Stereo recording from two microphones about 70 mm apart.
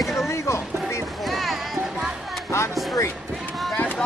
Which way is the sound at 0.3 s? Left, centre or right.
Left.